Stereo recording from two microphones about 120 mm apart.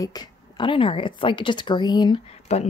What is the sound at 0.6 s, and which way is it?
Speech, 45° left (ahead or behind).